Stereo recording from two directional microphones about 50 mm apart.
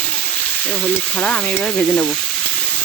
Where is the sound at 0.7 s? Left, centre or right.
Left.